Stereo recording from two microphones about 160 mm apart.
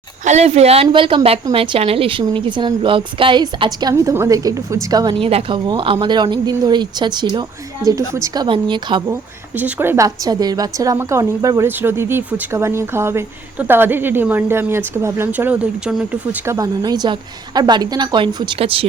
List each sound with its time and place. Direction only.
0.3 s a woman's voice: 45° right (ahead or behind); by 8.4 s 20° right (ahead or behind)
8.4 s a woman's voice: 30° right (ahead or behind)
9.6 s a woman's voice: 10° right (ahead or behind)
16.5 s a woman's voice: 20° right (ahead or behind)